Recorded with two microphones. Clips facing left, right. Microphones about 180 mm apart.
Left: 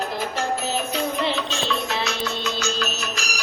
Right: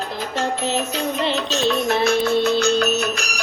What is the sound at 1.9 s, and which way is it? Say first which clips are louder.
Music: right 9 dB; 55° right (ahead or behind).